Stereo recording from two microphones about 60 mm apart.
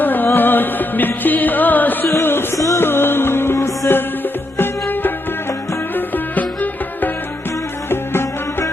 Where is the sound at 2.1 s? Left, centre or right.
Left.